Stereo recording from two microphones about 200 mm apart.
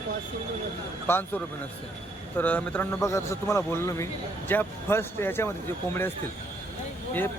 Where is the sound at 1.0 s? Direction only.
10° left (ahead or behind).